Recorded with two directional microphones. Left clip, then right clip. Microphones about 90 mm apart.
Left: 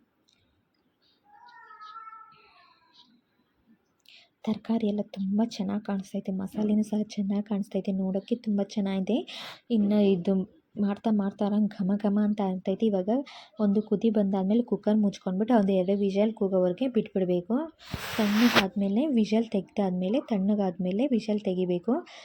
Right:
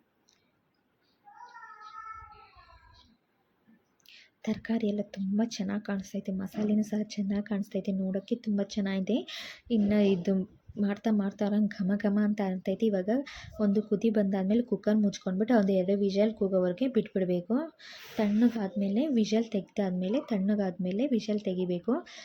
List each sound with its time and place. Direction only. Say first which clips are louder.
4.0 s a woman's voice: left 2 dB; 30° left (ahead or behind)